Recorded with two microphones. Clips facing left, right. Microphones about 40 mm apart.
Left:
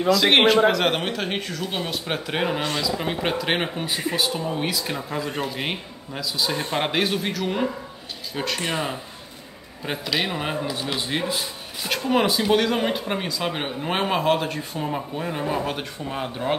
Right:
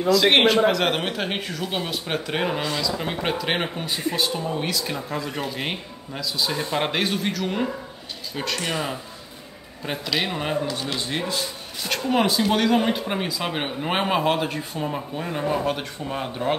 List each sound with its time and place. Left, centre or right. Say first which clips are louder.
0.1 s speech: even; centre
8.5 s speech: even; centre
9.8 s speech: even; centre